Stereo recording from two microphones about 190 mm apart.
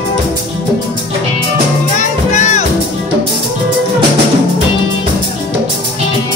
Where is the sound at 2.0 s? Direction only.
40° left (ahead or behind).